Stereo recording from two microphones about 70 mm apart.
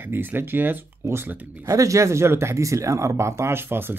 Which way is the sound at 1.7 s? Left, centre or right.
Right.